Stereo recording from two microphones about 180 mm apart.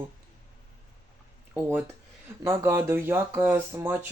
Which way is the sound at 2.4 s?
15° right (ahead or behind).